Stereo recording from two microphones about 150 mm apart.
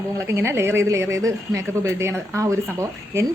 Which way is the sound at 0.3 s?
20° right (ahead or behind).